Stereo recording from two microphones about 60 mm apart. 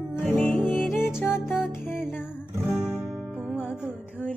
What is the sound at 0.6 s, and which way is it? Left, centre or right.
Music, centre.